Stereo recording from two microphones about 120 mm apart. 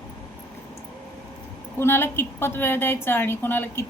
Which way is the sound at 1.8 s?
20° left (ahead or behind).